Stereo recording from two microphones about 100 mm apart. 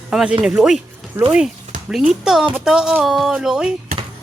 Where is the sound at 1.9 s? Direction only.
5° right (ahead or behind).